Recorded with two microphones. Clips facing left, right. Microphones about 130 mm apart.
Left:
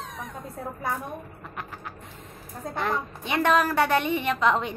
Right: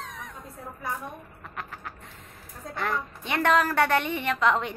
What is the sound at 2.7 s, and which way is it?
A woman's voice, 20° left (ahead or behind).